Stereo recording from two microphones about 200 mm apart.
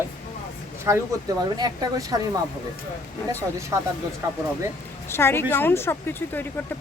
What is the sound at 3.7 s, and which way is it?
Speech, 15° right (ahead or behind).